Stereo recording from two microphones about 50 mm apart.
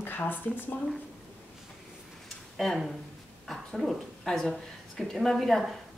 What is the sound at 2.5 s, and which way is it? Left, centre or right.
A woman's voice, centre.